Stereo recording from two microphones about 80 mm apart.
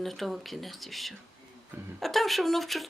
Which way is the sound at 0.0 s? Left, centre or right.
Centre.